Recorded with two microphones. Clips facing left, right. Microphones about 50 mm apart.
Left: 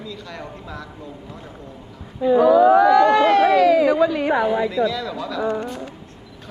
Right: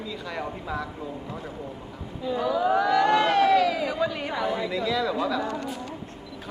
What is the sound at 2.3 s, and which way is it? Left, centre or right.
Speech, left.